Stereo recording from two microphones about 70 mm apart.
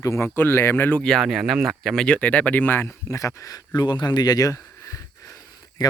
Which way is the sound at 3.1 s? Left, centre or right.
Left.